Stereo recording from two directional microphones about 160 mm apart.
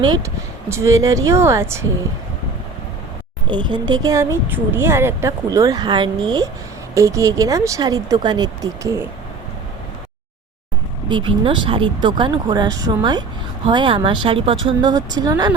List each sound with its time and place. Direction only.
0.0 s speech: 30° right (ahead or behind)
0.7 s speech: 20° right (ahead or behind)
3.4 s speech: 30° right (ahead or behind)
11.1 s speech: 30° right (ahead or behind)